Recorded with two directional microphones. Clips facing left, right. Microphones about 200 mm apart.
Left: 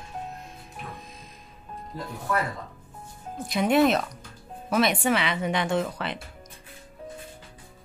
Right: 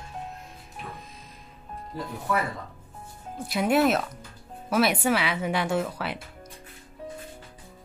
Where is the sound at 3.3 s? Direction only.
5° right (ahead or behind).